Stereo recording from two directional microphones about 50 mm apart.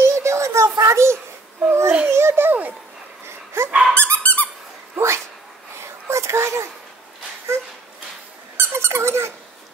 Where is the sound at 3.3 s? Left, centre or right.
Right.